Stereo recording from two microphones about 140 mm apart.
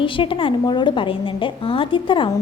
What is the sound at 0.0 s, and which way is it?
A woman's voice, 40° left (ahead or behind).